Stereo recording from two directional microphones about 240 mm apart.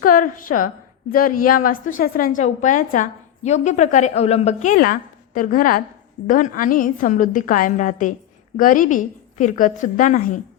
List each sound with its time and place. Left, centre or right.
0.0 s a woman's voice: left